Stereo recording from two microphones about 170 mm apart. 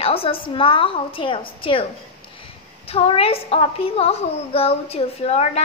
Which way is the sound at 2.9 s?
35° left (ahead or behind).